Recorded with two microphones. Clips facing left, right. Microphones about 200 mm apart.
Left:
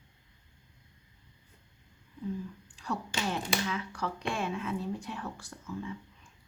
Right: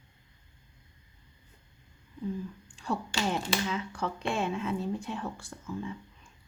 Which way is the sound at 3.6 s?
25° right (ahead or behind).